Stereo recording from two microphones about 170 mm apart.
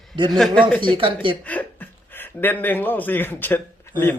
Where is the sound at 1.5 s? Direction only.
10° left (ahead or behind).